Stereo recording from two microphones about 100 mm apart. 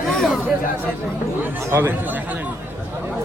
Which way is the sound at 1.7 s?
25° right (ahead or behind).